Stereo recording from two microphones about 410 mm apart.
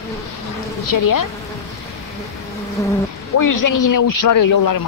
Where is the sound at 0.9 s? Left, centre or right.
Left.